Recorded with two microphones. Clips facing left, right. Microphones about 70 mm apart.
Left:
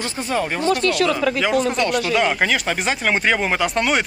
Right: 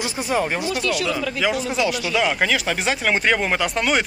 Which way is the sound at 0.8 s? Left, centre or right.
Left.